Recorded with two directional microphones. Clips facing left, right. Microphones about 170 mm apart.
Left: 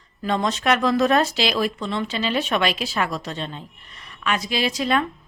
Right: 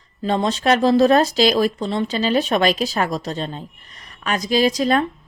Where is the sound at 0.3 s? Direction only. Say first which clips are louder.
Right 3 dB; 30° right (ahead or behind).